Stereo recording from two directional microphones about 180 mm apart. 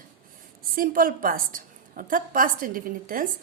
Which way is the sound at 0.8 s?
50° right (ahead or behind).